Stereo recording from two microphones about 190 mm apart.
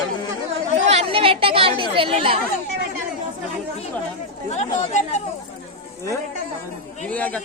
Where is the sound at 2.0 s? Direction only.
30° right (ahead or behind).